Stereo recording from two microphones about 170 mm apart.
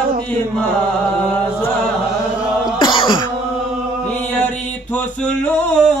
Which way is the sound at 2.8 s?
30° left (ahead or behind).